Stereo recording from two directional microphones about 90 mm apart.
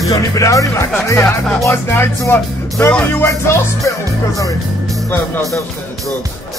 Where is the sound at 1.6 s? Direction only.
25° left (ahead or behind).